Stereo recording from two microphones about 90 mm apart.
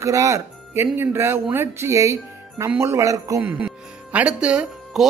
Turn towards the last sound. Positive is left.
turn(degrees=-10)  # may be behind; listen again after turning